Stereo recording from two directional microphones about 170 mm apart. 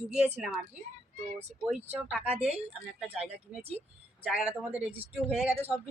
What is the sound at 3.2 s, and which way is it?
Speech, 35° right (ahead or behind).